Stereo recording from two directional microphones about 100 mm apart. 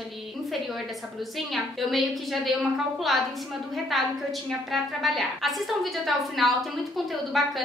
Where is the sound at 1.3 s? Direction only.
Centre (ahead or behind).